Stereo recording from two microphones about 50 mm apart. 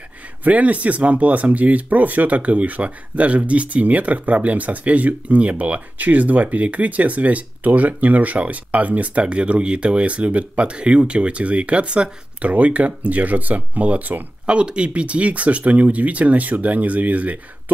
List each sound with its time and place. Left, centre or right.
0.4 s speech: right
14.4 s speech: right